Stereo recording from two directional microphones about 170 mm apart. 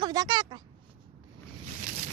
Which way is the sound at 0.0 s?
25° right (ahead or behind).